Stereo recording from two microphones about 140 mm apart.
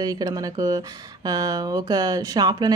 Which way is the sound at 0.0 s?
30° right (ahead or behind).